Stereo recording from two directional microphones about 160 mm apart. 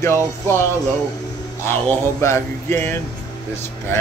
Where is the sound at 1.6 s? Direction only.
10° left (ahead or behind).